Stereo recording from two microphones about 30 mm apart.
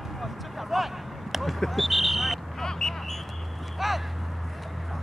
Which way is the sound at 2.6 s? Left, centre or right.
Centre.